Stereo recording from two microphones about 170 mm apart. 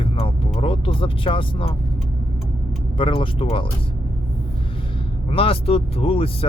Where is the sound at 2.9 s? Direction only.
30° left (ahead or behind).